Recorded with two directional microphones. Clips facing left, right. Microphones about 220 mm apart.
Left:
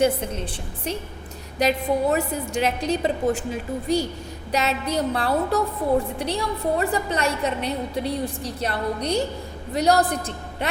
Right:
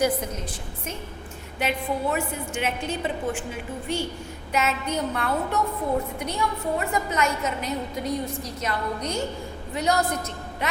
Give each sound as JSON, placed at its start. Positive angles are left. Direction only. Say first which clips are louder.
{"t": 0.0, "sound": "a woman's voice", "louder": "left 3 dB", "side_deg": 30}
{"t": 1.5, "sound": "a woman's voice", "louder": "left 6 dB", "side_deg": 40}